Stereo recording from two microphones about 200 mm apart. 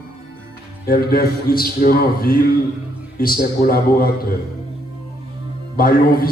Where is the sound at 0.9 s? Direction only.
50° left (ahead or behind).